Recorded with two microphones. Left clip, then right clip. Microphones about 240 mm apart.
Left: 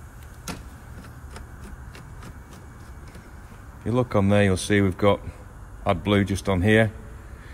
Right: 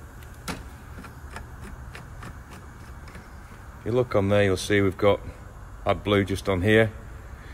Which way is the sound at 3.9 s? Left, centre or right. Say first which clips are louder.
Even; left.